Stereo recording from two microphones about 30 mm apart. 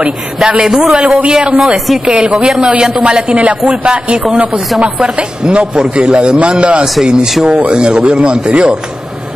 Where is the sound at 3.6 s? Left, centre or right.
Right.